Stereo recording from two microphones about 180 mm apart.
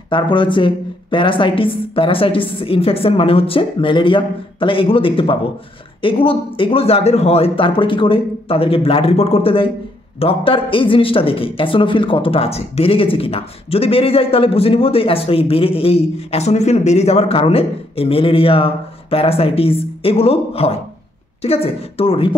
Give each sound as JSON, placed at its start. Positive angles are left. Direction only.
{"t": 0.1, "sound": "a woman's voice", "side_deg": 25}